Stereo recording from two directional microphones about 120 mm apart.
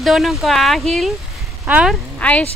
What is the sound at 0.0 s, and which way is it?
Speech, centre (ahead or behind).